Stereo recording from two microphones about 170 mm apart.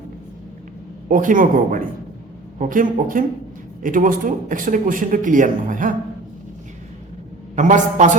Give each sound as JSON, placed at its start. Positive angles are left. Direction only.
{"t": 1.0, "sound": "speech", "side_deg": -50}
{"t": 7.5, "sound": "speech", "side_deg": -45}